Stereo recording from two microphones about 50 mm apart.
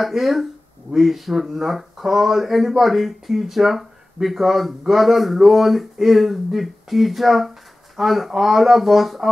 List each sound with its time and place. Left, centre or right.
0.0 s speech: centre